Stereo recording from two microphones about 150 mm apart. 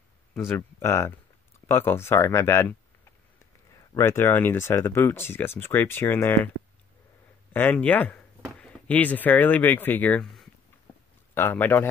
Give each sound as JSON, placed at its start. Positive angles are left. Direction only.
{"t": 0.3, "sound": "speech", "side_deg": 15}
{"t": 3.9, "sound": "speech", "side_deg": 15}
{"t": 7.5, "sound": "speech", "side_deg": 10}
{"t": 10.2, "sound": "a sound", "side_deg": 0}
{"t": 11.3, "sound": "speech", "side_deg": 15}